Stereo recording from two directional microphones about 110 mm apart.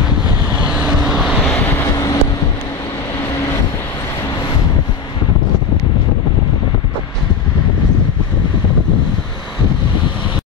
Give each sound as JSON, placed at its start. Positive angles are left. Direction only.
{"t": 0.6, "sound": "vehicle", "side_deg": -10}
{"t": 1.5, "sound": "vehicle", "side_deg": 20}